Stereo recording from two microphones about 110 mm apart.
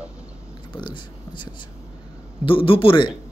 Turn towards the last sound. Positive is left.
turn(degrees=50)  # may be behind; listen again after turning